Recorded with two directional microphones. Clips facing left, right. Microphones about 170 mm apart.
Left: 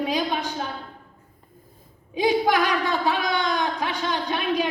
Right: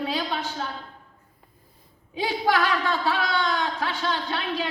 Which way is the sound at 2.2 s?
15° left (ahead or behind).